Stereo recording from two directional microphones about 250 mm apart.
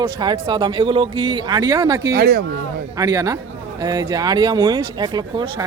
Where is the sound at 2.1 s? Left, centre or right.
Right.